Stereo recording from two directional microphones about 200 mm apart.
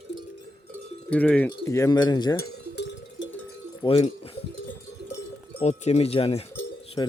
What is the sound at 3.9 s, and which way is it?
Speech, 25° left (ahead or behind).